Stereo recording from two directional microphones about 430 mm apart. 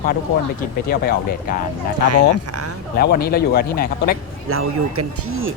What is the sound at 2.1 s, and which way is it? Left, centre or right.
Speech, right.